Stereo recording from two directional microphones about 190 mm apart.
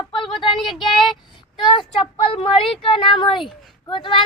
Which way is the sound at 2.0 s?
30° left (ahead or behind).